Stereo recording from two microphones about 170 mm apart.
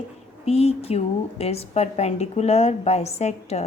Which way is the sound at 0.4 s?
35° left (ahead or behind).